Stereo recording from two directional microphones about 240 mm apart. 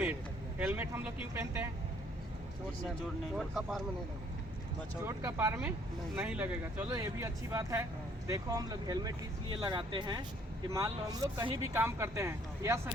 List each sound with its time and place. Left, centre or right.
0.6 s speech: centre
3.3 s speech: centre
5.0 s speech: centre